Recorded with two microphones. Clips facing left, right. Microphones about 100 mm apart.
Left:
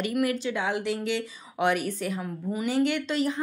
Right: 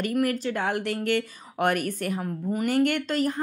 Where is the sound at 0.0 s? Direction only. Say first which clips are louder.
Right 1 dB; 45° right (ahead or behind).